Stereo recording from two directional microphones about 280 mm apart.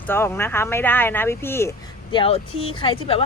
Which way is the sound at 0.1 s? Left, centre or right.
Centre.